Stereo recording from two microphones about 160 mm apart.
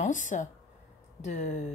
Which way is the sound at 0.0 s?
50° left (ahead or behind).